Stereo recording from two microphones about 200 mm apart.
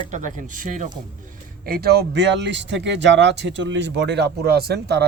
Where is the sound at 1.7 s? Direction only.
50° right (ahead or behind).